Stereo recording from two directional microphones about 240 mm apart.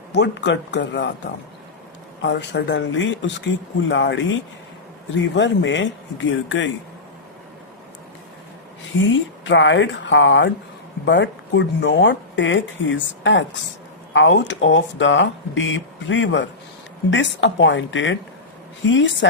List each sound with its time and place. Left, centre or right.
0.1 s speech: left
9.0 s speech: left